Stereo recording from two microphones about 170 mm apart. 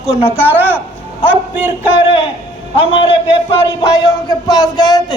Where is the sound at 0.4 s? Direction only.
10° right (ahead or behind).